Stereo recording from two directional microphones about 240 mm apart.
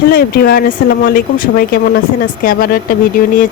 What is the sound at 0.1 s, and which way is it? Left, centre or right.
Speech, left.